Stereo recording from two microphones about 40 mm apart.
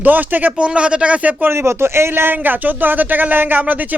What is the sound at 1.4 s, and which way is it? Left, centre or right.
Speech, right.